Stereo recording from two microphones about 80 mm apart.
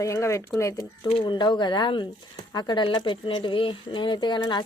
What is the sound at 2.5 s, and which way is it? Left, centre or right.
Speech, left.